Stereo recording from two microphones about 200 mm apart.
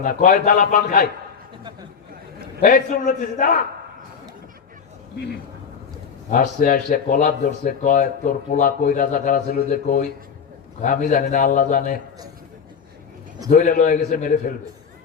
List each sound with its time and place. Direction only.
0.0 s speech: 40° left (ahead or behind)
2.6 s speech: 45° left (ahead or behind)
6.3 s a man's voice: 40° left (ahead or behind)
13.5 s speech: 45° left (ahead or behind)